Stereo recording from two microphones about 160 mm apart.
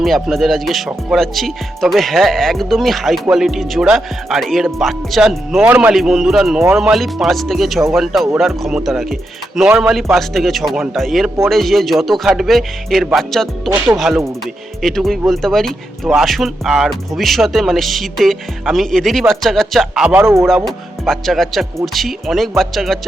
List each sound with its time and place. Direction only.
0.0 s speech: centre (ahead or behind)
13.7 s speech: 20° right (ahead or behind)
13.9 s speech: centre (ahead or behind); by 20.5 s 15° right (ahead or behind)
20.7 s speech: centre (ahead or behind)